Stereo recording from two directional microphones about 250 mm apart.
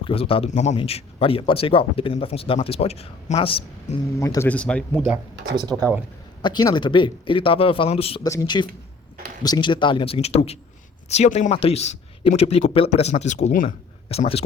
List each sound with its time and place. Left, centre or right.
0.0 s a man's voice: left; by 5.1 s centre
5.5 s speech: centre
6.4 s a man's voice: centre